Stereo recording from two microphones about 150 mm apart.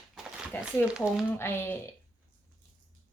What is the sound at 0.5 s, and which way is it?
Speech, 10° left (ahead or behind).